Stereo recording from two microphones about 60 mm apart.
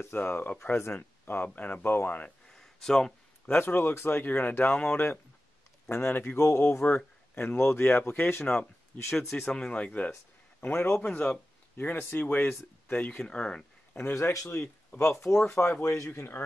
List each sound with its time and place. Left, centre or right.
0.0 s speech: left
0.9 s speech: left
1.8 s speech: left
2.4 s a sound: centre
3.4 s speech: left
5.9 s speech: left
9.5 s speech: centre
10.7 s speech: left; by 13.7 s centre
14.0 s speech: left
14.3 s speech: left
15.0 s speech: left
16.1 s speech: left